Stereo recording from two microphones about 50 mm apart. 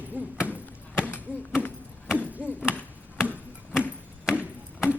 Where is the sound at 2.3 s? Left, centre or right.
Right.